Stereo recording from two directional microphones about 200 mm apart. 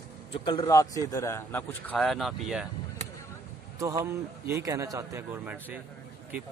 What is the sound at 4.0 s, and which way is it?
A man's voice, 15° right (ahead or behind).